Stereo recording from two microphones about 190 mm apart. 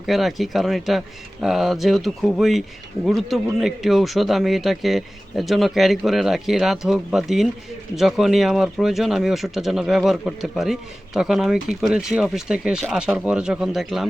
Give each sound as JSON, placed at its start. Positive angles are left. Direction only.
{"t": 0.0, "sound": "speech", "side_deg": 0}